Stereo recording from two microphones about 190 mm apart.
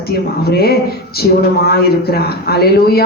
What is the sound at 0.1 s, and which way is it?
Speech, 55° left (ahead or behind).